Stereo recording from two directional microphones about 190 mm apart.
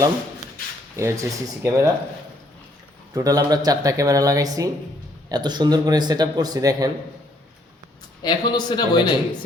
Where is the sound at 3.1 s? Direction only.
20° right (ahead or behind).